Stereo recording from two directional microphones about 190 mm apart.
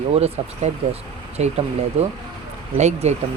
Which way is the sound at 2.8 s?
35° right (ahead or behind).